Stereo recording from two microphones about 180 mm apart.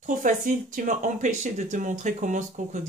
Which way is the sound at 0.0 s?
45° right (ahead or behind).